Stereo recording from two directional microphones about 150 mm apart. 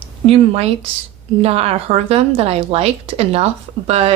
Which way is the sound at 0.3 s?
40° right (ahead or behind).